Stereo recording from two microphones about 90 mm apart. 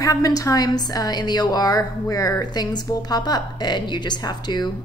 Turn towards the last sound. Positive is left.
turn(degrees=50)  # may be behind; listen again after turning